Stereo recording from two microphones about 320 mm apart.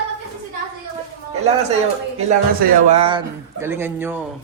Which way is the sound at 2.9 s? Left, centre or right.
Centre.